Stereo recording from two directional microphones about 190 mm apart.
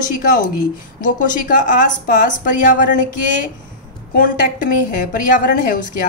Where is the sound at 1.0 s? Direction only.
45° left (ahead or behind).